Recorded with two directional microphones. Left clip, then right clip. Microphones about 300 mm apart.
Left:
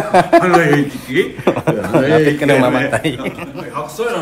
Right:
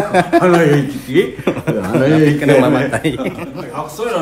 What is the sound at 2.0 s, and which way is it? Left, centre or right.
Speech, centre.